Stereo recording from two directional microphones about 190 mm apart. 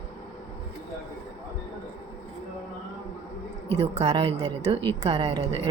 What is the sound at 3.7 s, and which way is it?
A woman's voice, 35° right (ahead or behind).